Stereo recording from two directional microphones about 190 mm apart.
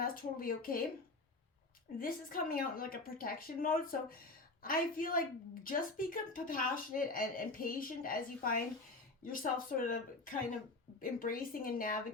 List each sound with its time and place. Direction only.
0.0 s speech: 50° left (ahead or behind)
2.0 s speech: 50° left (ahead or behind)